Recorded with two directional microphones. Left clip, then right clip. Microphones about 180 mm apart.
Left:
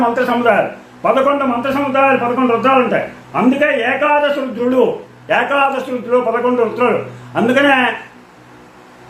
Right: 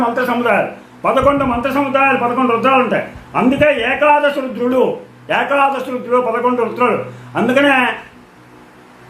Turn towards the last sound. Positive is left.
turn(degrees=-15)  # may be behind; listen again after turning